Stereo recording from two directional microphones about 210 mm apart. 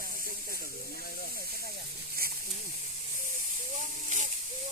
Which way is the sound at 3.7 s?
35° right (ahead or behind).